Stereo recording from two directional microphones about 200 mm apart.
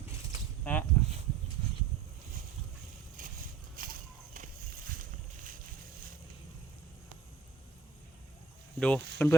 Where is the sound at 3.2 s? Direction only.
40° right (ahead or behind).